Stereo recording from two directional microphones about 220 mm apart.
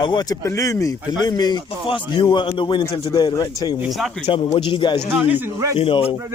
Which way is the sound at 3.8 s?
Centre (ahead or behind).